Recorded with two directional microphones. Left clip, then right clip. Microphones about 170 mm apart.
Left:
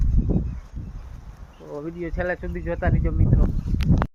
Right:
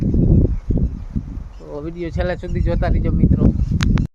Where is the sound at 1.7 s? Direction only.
15° right (ahead or behind).